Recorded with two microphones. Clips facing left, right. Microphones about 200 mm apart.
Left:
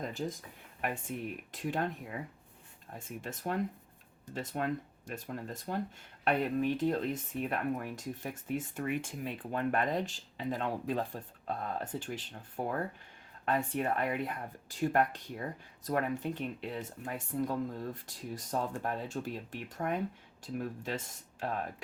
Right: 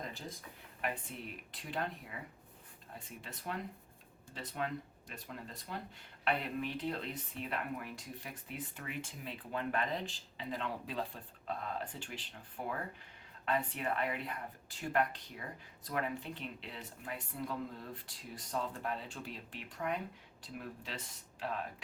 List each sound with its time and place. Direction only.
1.1 s speech: 50° left (ahead or behind)
3.0 s speech: 45° left (ahead or behind)